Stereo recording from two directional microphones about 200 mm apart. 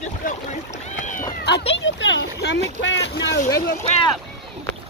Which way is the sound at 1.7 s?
65° left (ahead or behind).